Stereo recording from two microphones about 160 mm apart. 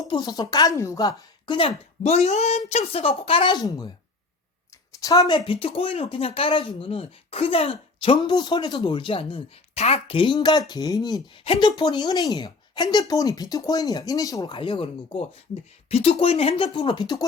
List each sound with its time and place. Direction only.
0.0 s speech: 25° left (ahead or behind)
5.0 s speech: 25° left (ahead or behind)